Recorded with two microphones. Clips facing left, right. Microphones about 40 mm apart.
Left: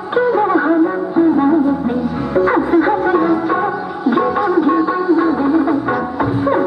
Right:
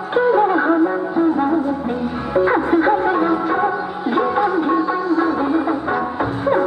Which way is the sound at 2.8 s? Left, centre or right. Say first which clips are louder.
Left 2 dB; centre.